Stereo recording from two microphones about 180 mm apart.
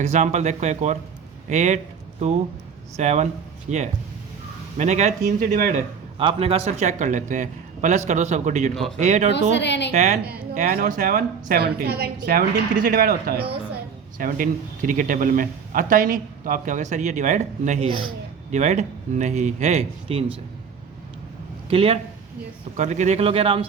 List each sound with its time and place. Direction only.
0.0 s a man's voice: 40° right (ahead or behind)
6.1 s a man's voice: 30° right (ahead or behind)
8.7 s speech: centre (ahead or behind)
9.0 s a man's voice: 40° right (ahead or behind)
9.3 s a woman's voice: 75° left (ahead or behind)
9.9 s a man's voice: 40° right (ahead or behind)
10.7 s a man's voice: 50° right (ahead or behind); by 20.2 s 35° right (ahead or behind)
21.7 s a man's voice: 30° right (ahead or behind)